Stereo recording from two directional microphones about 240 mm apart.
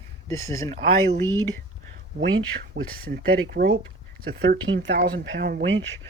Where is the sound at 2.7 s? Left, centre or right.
Right.